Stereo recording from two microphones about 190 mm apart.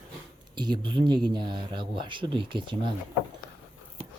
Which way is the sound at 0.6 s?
25° right (ahead or behind).